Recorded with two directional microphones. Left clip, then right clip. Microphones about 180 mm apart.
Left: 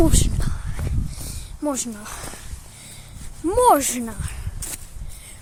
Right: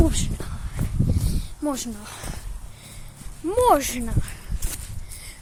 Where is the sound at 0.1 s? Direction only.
30° left (ahead or behind).